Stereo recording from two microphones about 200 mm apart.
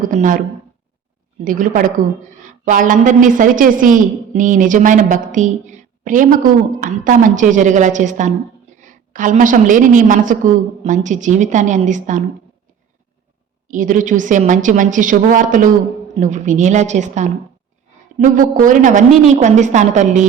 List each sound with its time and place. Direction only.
0.0 s a woman's voice: 40° right (ahead or behind)
1.5 s a woman's voice: 40° right (ahead or behind)
13.7 s a woman's voice: 40° right (ahead or behind)